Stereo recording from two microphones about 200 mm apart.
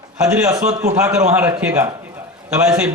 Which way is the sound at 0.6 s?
35° right (ahead or behind).